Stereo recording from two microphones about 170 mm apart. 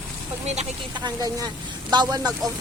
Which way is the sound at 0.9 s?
25° right (ahead or behind).